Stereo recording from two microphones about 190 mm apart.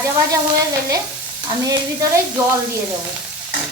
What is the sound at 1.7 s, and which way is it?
Stir, 20° right (ahead or behind).